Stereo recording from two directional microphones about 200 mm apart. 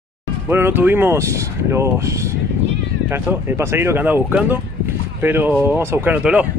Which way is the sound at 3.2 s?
10° right (ahead or behind).